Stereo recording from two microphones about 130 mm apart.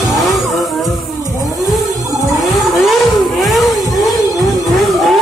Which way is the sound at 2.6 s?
Centre (ahead or behind).